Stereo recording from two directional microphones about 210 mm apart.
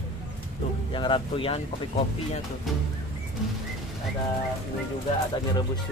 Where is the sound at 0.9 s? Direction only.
25° left (ahead or behind).